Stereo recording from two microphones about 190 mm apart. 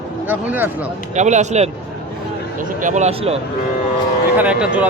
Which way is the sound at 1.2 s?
40° right (ahead or behind).